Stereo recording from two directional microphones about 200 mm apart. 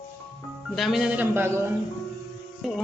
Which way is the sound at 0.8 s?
Centre (ahead or behind).